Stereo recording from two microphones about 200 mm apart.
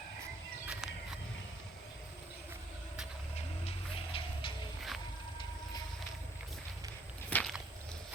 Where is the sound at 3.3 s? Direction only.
30° left (ahead or behind).